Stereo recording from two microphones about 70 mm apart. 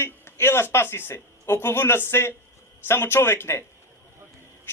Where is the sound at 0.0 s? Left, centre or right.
Left.